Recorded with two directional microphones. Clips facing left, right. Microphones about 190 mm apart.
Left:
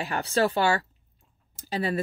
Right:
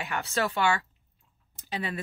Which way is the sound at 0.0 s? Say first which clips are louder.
Left 5 dB; 35° left (ahead or behind).